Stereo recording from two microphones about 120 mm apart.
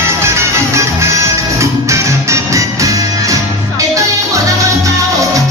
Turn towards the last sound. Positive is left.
turn(degrees=-25)  # may be behind; listen again after turning